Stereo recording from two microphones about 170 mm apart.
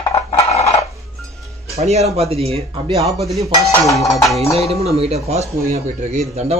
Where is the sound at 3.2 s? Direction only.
Centre (ahead or behind).